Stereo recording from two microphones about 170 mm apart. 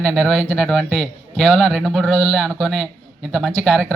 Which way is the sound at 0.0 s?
5° left (ahead or behind).